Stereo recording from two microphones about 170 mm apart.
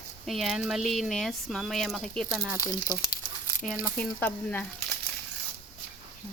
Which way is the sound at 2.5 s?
20° left (ahead or behind).